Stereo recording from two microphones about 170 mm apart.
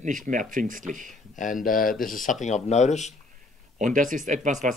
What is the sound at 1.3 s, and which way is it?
Speech, 50° left (ahead or behind).